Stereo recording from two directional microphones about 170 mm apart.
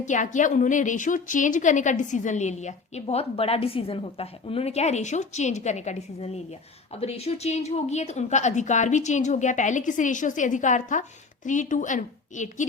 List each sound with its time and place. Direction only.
0.0 s a woman's voice: 45° left (ahead or behind)